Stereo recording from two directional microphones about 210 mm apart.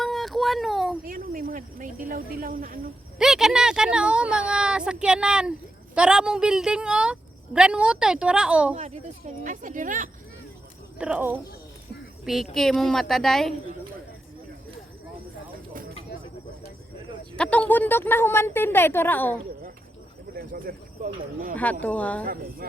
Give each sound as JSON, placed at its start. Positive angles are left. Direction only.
{"t": 0.0, "sound": "a sound", "side_deg": 0}
{"t": 1.0, "sound": "speech", "side_deg": -40}
{"t": 3.2, "sound": "speech", "side_deg": -5}
{"t": 9.4, "sound": "speech", "side_deg": -40}
{"t": 10.9, "sound": "speech", "side_deg": -5}
{"t": 17.3, "sound": "a woman's voice", "side_deg": 5}
{"t": 20.3, "sound": "speech", "side_deg": -45}
{"t": 21.5, "sound": "a woman's voice", "side_deg": 5}
{"t": 22.2, "sound": "speech", "side_deg": -45}